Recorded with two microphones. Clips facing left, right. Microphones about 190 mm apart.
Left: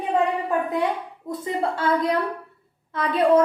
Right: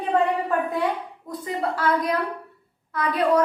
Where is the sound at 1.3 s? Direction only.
25° left (ahead or behind).